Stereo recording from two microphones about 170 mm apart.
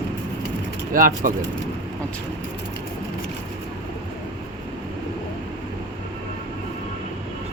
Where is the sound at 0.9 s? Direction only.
55° right (ahead or behind).